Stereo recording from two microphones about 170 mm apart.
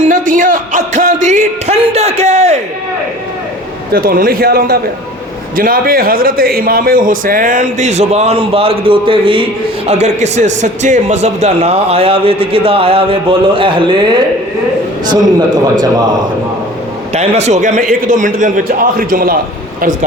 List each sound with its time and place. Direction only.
0.0 s speech: 50° right (ahead or behind)
3.9 s a man's voice: 60° right (ahead or behind); by 15.7 s 25° right (ahead or behind)
17.2 s a man's voice: 40° right (ahead or behind)